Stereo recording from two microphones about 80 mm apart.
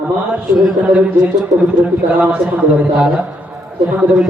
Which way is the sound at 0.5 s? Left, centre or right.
Centre.